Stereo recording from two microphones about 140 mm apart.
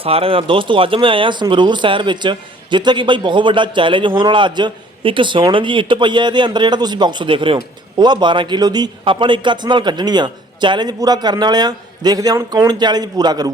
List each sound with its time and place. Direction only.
0.0 s speech: 40° right (ahead or behind)